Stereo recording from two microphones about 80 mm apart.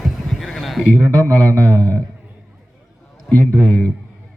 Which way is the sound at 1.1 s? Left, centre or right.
Centre.